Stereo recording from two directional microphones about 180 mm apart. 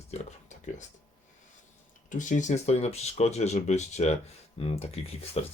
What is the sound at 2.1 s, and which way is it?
Speech, 45° left (ahead or behind).